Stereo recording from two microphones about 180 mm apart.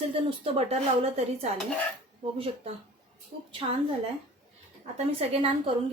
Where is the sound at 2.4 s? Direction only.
30° right (ahead or behind).